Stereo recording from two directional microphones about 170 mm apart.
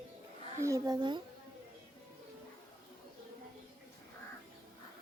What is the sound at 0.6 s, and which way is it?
Speech, 20° right (ahead or behind).